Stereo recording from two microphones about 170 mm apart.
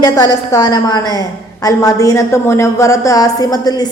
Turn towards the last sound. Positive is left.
turn(degrees=25)  # may be behind; listen again after turning